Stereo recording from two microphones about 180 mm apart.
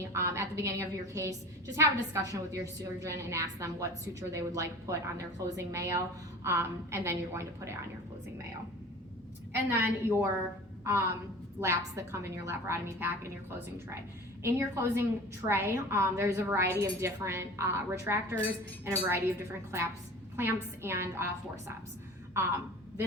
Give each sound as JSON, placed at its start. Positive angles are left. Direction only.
{"t": 0.0, "sound": "a woman's voice", "side_deg": -15}
{"t": 9.6, "sound": "a woman's voice", "side_deg": -15}
{"t": 14.4, "sound": "a woman's voice", "side_deg": -15}
{"t": 22.4, "sound": "a woman's voice", "side_deg": -15}